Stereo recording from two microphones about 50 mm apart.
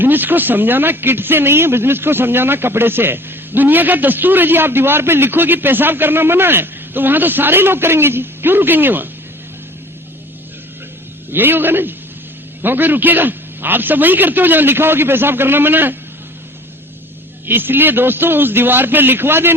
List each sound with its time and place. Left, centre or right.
0.0 s a man's voice: right
11.3 s a man's voice: right
17.4 s a man's voice: right